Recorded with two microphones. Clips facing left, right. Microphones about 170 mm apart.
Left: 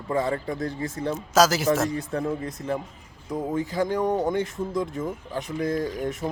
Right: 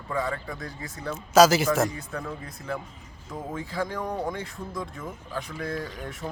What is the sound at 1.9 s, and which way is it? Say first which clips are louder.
Speech: left 8 dB; 30° left (ahead or behind).